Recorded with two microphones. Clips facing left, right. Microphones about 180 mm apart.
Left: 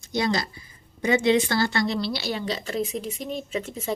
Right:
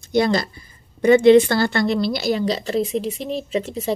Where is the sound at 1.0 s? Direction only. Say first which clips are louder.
Right 9 dB; 60° right (ahead or behind).